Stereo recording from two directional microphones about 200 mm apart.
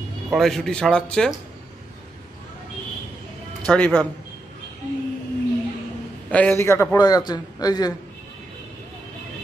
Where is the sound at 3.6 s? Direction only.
5° left (ahead or behind).